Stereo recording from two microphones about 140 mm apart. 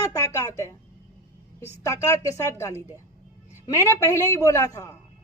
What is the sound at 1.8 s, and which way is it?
A man's voice, 20° left (ahead or behind).